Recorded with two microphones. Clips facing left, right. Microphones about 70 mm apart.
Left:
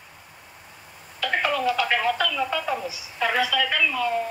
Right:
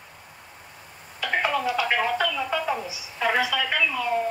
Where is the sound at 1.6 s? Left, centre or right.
Left.